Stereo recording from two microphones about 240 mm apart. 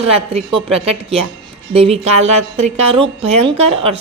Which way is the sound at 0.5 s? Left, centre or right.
Right.